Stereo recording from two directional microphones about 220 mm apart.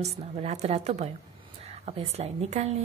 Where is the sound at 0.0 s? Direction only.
30° right (ahead or behind).